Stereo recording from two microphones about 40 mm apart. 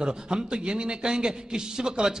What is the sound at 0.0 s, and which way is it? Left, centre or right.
A man's voice, centre.